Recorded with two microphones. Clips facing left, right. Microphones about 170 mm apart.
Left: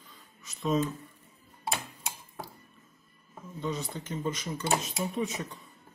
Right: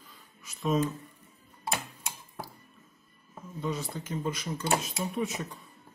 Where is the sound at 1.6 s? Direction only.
20° left (ahead or behind).